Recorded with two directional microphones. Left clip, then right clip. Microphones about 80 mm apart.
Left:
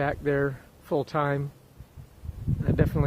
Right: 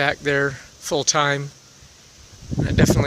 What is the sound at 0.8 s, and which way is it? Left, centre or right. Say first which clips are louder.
Speech: right 7 dB; right.